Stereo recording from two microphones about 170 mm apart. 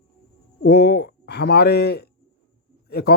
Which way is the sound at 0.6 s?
70° left (ahead or behind).